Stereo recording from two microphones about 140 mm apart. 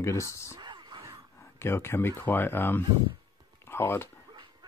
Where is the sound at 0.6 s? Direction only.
30° right (ahead or behind).